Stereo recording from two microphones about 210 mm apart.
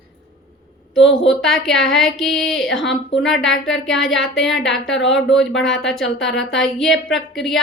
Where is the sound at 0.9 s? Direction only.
60° left (ahead or behind).